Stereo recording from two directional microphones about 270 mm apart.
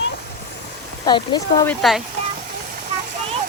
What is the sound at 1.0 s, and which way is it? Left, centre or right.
Speech, centre.